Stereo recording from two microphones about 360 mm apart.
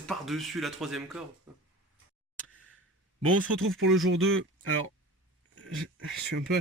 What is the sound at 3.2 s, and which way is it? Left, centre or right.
Speech, right.